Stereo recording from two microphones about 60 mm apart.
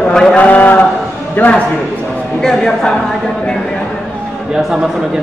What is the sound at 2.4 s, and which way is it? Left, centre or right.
Speech, centre.